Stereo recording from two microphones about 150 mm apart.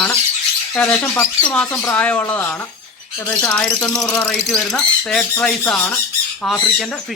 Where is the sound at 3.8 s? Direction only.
25° left (ahead or behind).